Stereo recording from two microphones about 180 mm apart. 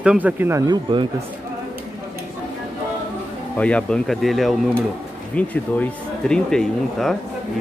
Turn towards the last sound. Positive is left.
turn(degrees=5)  # may be behind; listen again after turning